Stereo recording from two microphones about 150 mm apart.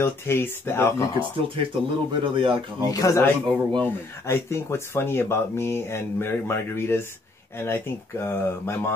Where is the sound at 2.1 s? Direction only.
35° right (ahead or behind).